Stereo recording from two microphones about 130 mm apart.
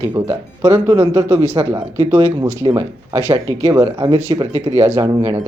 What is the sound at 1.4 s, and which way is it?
Speech, 55° right (ahead or behind).